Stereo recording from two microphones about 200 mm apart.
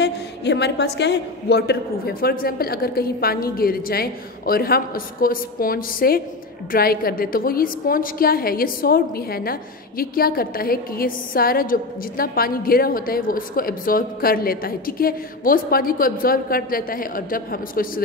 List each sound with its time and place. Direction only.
0.0 s a woman's voice: 60° left (ahead or behind)